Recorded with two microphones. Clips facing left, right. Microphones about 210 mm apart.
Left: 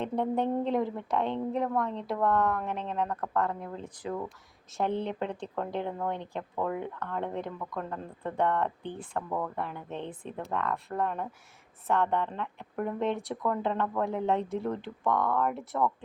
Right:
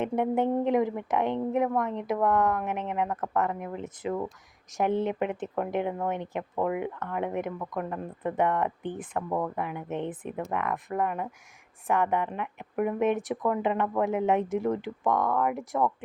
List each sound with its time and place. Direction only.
0.0 s speech: 20° right (ahead or behind)